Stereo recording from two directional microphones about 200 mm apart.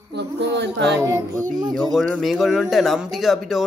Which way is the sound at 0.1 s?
60° right (ahead or behind).